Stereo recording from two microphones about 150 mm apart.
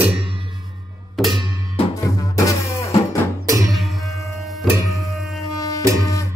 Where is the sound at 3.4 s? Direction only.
25° right (ahead or behind).